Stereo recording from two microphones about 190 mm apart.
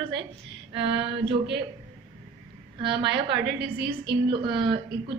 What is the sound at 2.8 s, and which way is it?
A woman's voice, 65° right (ahead or behind).